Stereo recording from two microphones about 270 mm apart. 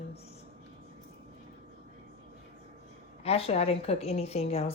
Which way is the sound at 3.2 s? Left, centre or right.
Left.